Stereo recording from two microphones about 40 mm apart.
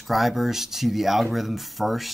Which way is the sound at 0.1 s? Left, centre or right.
Centre.